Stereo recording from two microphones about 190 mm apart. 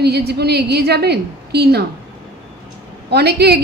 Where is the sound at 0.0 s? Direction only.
60° right (ahead or behind).